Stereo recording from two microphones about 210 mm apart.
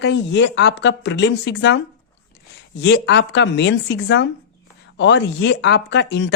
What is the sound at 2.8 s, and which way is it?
Speech, 55° left (ahead or behind).